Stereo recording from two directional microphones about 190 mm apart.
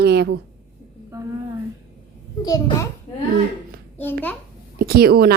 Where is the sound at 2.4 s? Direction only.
20° left (ahead or behind).